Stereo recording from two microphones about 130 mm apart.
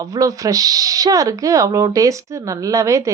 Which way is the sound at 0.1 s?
25° right (ahead or behind).